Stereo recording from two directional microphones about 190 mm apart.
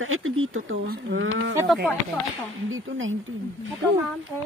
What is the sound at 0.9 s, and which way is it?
Speech, 75° right (ahead or behind).